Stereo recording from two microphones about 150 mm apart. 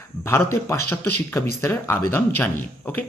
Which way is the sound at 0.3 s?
15° left (ahead or behind).